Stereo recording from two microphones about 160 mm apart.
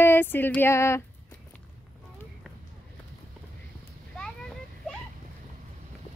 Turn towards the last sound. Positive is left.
turn(degrees=5)  # may be behind; listen again after turning